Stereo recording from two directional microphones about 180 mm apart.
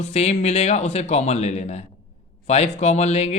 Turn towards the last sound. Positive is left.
turn(degrees=35)  # may be behind; listen again after turning